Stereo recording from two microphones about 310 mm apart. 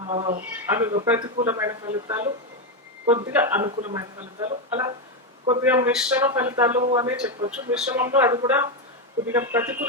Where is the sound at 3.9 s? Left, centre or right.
Centre.